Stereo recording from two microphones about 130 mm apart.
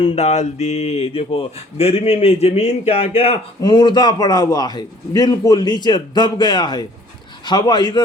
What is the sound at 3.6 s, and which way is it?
A man's voice, 35° left (ahead or behind).